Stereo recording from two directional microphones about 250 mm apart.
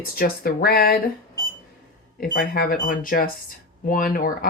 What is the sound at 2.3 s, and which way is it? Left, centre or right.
Speech, left.